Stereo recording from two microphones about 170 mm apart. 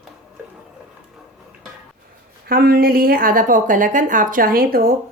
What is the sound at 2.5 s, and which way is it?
Speech, 60° right (ahead or behind).